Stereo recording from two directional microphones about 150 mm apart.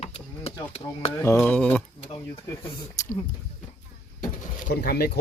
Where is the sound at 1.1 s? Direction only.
20° left (ahead or behind).